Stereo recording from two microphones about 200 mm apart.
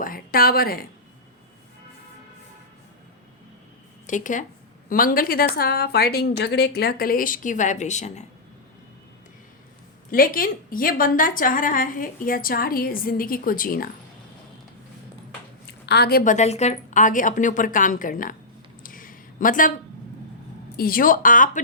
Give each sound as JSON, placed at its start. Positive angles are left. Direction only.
{"t": 0.0, "sound": "a sound", "side_deg": 45}
{"t": 4.0, "sound": "a woman's voice", "side_deg": 40}
{"t": 10.1, "sound": "a woman's voice", "side_deg": 45}
{"t": 15.9, "sound": "a woman's voice", "side_deg": 55}
{"t": 18.8, "sound": "a sound", "side_deg": 45}
{"t": 20.7, "sound": "a woman's voice", "side_deg": 45}